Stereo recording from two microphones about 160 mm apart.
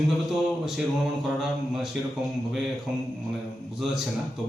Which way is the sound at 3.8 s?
5° right (ahead or behind).